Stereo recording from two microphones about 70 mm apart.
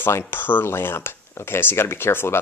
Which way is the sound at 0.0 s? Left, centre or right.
Left.